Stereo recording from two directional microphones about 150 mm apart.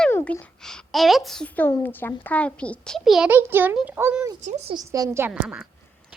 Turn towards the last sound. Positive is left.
turn(degrees=-15)  # may be behind; listen again after turning